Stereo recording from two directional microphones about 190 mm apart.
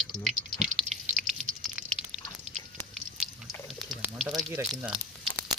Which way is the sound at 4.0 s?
10° right (ahead or behind).